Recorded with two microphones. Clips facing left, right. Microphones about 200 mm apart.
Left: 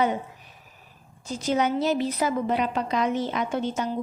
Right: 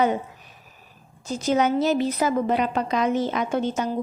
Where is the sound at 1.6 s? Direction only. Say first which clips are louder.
Right 2 dB; 45° right (ahead or behind).